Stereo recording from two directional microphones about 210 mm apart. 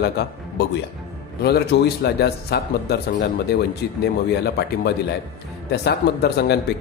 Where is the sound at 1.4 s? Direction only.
50° left (ahead or behind).